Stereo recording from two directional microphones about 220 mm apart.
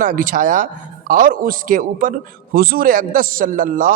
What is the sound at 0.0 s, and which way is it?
A man's voice, 35° right (ahead or behind).